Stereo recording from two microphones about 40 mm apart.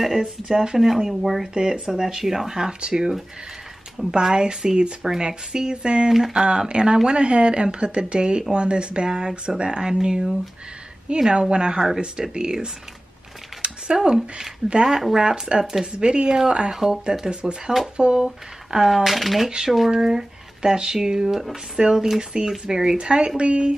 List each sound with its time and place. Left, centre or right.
0.2 s speech: centre
1.5 s speech: right
13.6 s a sound: right
14.9 s speech: centre
15.2 s speech: right
16.7 s speech: centre
17.3 s speech: right
18.2 s speech: centre
19.9 s speech: centre